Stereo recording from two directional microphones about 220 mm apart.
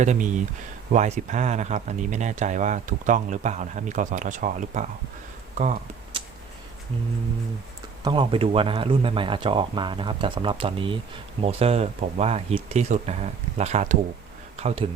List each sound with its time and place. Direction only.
0.0 s speech: 35° right (ahead or behind)
8.0 s speech: 20° right (ahead or behind)